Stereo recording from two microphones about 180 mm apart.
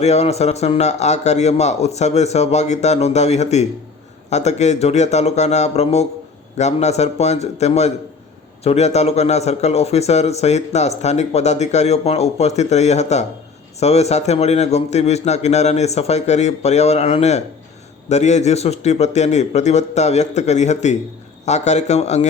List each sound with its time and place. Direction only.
0.0 s speech: 35° left (ahead or behind)